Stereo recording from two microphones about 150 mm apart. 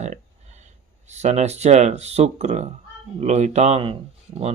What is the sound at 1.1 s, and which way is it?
Speech, 50° right (ahead or behind).